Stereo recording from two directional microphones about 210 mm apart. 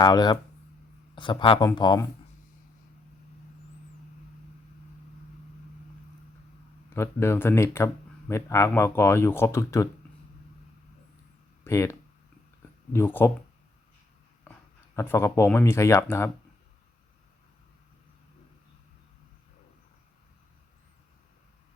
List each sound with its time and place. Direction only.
0.0 s speech: 20° left (ahead or behind)
6.9 s speech: 10° left (ahead or behind)
11.6 s speech: 15° left (ahead or behind)
14.9 s speech: 10° left (ahead or behind)